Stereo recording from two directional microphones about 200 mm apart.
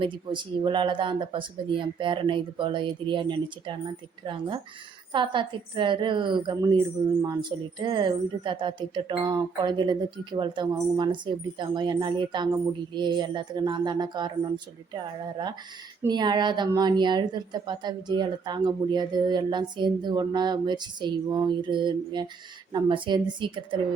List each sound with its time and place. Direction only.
0.0 s a woman's voice: 25° right (ahead or behind)